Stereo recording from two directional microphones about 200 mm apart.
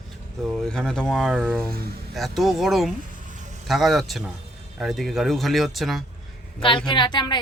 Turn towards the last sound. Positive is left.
turn(degrees=20)  # may be behind; listen again after turning